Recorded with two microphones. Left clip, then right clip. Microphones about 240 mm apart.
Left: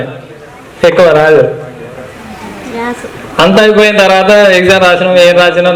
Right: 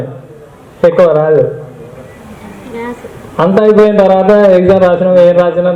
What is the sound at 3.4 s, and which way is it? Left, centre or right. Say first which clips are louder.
A man's voice: left 2 dB; left.